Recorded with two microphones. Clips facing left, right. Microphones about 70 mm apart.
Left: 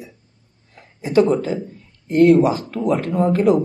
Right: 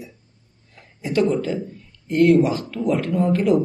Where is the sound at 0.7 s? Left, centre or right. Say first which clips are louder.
Left 6 dB; left.